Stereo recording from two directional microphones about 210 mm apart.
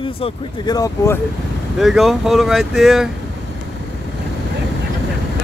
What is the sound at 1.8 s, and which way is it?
Speech, centre (ahead or behind).